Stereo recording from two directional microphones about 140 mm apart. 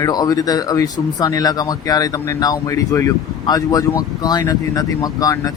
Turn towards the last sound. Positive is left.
turn(degrees=25)  # may be behind; listen again after turning